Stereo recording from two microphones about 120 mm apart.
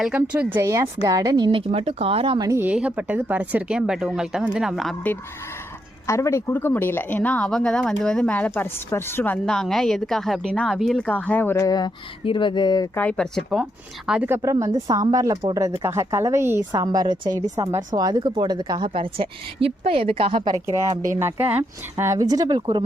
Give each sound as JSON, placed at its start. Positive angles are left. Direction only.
{"t": 0.2, "sound": "a woman's voice", "side_deg": -20}
{"t": 2.6, "sound": "a woman's voice", "side_deg": -10}
{"t": 6.1, "sound": "speech", "side_deg": 25}
{"t": 9.5, "sound": "a woman's voice", "side_deg": 5}
{"t": 11.5, "sound": "speech", "side_deg": 30}
{"t": 12.2, "sound": "speech", "side_deg": 45}
{"t": 13.0, "sound": "speech", "side_deg": 10}
{"t": 14.3, "sound": "speech", "side_deg": -25}
{"t": 16.7, "sound": "speech", "side_deg": -30}
{"t": 18.9, "sound": "a woman's voice", "side_deg": -50}
{"t": 20.7, "sound": "speech", "side_deg": -25}